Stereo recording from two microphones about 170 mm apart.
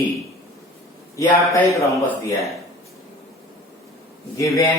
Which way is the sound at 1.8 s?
20° left (ahead or behind).